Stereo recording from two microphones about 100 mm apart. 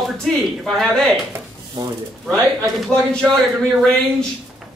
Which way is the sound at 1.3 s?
25° right (ahead or behind).